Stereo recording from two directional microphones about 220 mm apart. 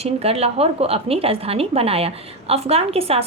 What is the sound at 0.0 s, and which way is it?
A woman's voice, 25° right (ahead or behind).